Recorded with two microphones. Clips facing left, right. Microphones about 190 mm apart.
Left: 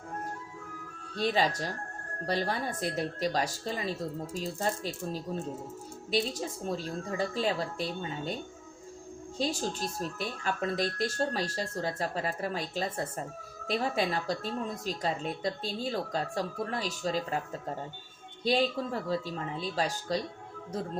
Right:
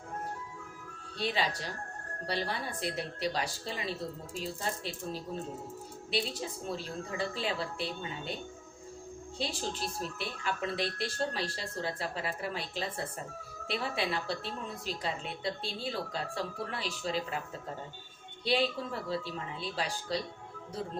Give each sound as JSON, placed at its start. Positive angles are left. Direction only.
{"t": 1.1, "sound": "a woman's voice", "side_deg": 40}
{"t": 9.4, "sound": "a woman's voice", "side_deg": 40}
{"t": 18.4, "sound": "a woman's voice", "side_deg": 40}